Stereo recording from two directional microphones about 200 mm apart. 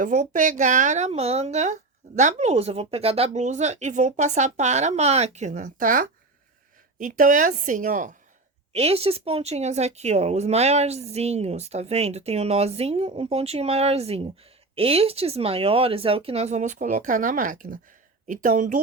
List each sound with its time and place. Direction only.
0.0 s speech: 40° right (ahead or behind)